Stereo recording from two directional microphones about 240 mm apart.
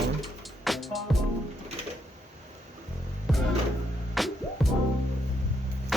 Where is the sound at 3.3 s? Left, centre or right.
Centre.